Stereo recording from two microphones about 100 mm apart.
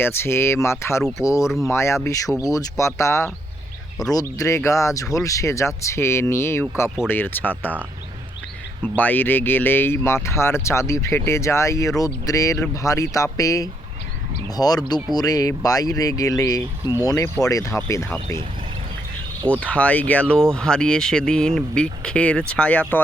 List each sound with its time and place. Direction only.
0.0 s speech: 25° left (ahead or behind)
1.5 s speech: centre (ahead or behind)
1.7 s speech: 25° left (ahead or behind)
9.0 s speech: 20° left (ahead or behind)
19.5 s speech: 15° left (ahead or behind)